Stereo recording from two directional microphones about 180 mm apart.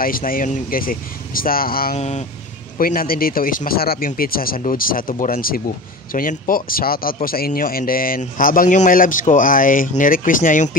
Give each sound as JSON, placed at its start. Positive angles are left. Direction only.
{"t": 0.0, "sound": "a man's voice", "side_deg": 50}
{"t": 2.0, "sound": "speech", "side_deg": 40}
{"t": 2.8, "sound": "a man's voice", "side_deg": 55}